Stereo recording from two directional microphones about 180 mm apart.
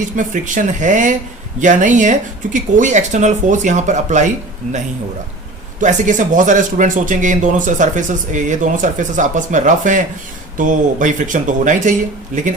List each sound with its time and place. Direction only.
0.2 s speech: 45° right (ahead or behind)
5.8 s speech: 45° right (ahead or behind)